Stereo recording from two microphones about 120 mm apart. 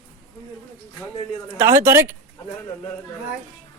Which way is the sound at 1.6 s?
20° right (ahead or behind).